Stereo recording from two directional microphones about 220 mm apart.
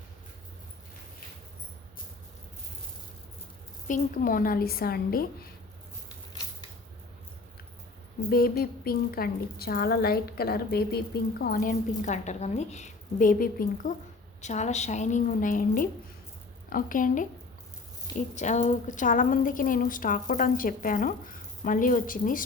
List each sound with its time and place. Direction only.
3.8 s a woman's voice: 40° left (ahead or behind)
8.3 s a woman's voice: 45° left (ahead or behind)
18.3 s a woman's voice: 35° left (ahead or behind)